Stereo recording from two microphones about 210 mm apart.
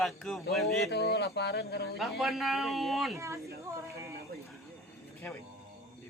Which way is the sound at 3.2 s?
15° right (ahead or behind).